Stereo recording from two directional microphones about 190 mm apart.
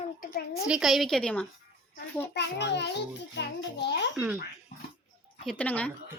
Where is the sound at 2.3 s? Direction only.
65° left (ahead or behind).